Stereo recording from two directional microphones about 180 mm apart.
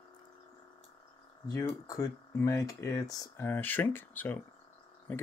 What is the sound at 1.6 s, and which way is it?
Speech, 20° left (ahead or behind).